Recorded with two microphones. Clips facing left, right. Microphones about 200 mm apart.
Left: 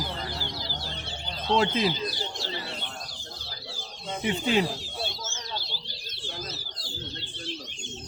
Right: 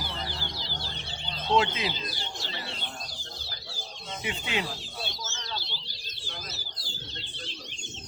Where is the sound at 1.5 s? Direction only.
40° left (ahead or behind).